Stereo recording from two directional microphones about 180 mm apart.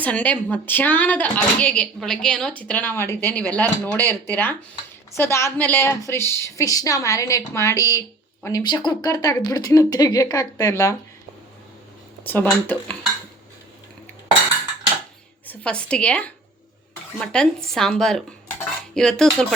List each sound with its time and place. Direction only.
0.0 s speech: 10° left (ahead or behind)
12.2 s speech: 10° left (ahead or behind)
15.4 s speech: 5° left (ahead or behind)